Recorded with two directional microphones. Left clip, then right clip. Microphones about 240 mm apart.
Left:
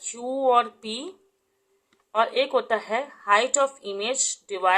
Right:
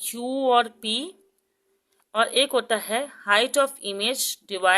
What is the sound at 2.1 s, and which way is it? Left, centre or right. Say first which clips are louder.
Speech: right 1 dB; right.